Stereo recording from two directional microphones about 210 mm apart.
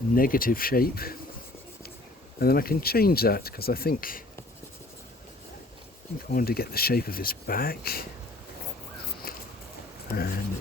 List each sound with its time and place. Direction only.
0.1 s speech: 40° left (ahead or behind)
2.4 s speech: 45° left (ahead or behind)
6.3 s speech: 45° left (ahead or behind)
9.3 s a sound: 45° left (ahead or behind)
10.1 s speech: 45° left (ahead or behind)